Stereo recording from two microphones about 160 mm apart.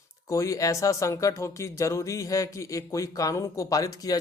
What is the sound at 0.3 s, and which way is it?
Speech, 20° left (ahead or behind).